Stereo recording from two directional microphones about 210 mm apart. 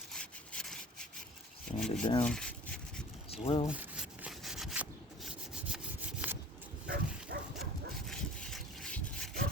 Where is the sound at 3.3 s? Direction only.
25° left (ahead or behind).